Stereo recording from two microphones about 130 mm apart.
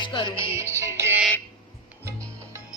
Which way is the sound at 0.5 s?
20° right (ahead or behind).